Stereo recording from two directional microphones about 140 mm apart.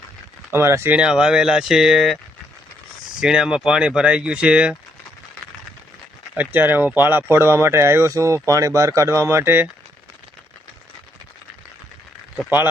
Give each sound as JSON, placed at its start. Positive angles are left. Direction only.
{"t": 0.5, "sound": "speech", "side_deg": -20}
{"t": 3.2, "sound": "speech", "side_deg": -5}
{"t": 6.3, "sound": "speech", "side_deg": -10}